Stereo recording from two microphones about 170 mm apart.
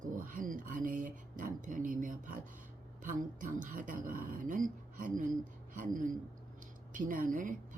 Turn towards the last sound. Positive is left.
turn(degrees=-50)  # may be behind; listen again after turning